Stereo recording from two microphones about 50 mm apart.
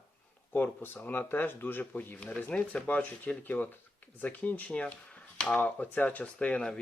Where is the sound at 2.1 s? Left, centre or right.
Left.